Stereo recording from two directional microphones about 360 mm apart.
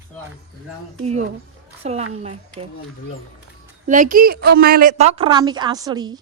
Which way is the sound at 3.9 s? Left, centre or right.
Right.